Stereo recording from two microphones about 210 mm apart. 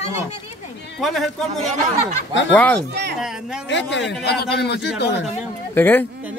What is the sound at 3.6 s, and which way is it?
A man's voice, 55° left (ahead or behind).